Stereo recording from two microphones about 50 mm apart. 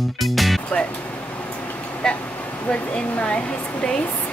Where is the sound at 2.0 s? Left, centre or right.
Centre.